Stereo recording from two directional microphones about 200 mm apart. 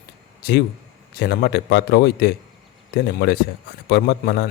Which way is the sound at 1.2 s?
55° left (ahead or behind).